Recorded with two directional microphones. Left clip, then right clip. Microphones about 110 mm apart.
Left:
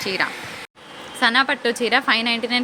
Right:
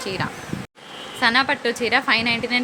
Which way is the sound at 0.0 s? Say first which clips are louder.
Left 4 dB; 15° left (ahead or behind).